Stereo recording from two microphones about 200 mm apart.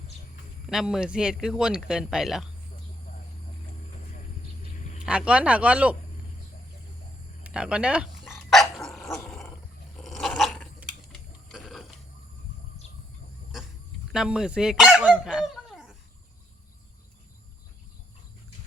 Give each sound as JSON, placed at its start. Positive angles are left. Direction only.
{"t": 0.7, "sound": "speech", "side_deg": 0}
{"t": 4.8, "sound": "vehicle", "side_deg": 35}
{"t": 5.0, "sound": "speech", "side_deg": -5}
{"t": 7.4, "sound": "dog", "side_deg": -5}
{"t": 10.0, "sound": "a sound", "side_deg": 0}
{"t": 11.4, "sound": "telephone bell ringing", "side_deg": 0}
{"t": 14.1, "sound": "dog", "side_deg": -5}